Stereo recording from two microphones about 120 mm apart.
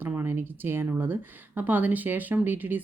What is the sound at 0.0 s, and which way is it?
Speech, 20° right (ahead or behind).